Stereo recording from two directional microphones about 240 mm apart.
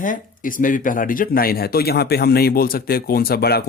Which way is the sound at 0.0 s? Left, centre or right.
Left.